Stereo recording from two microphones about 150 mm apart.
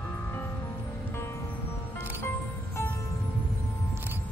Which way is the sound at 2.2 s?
15° left (ahead or behind).